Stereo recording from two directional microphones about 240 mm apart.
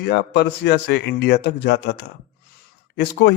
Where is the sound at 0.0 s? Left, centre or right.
Left.